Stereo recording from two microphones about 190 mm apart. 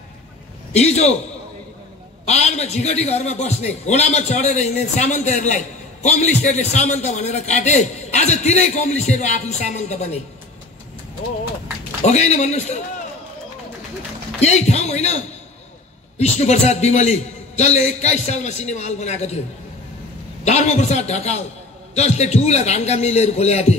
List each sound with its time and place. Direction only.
0.7 s a man's voice: 35° left (ahead or behind)
2.2 s a man's voice: 35° left (ahead or behind)
12.0 s a man's voice: 35° left (ahead or behind)
14.4 s a man's voice: 35° left (ahead or behind)
20.4 s a man's voice: 35° left (ahead or behind)